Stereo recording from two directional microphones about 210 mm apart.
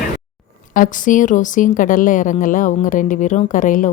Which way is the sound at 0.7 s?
40° left (ahead or behind).